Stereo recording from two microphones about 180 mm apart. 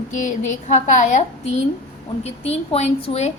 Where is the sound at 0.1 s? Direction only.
45° left (ahead or behind).